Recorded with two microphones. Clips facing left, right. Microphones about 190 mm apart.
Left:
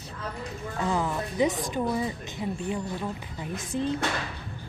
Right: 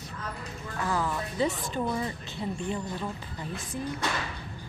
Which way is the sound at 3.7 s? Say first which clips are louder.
Left 6 dB; 20° left (ahead or behind).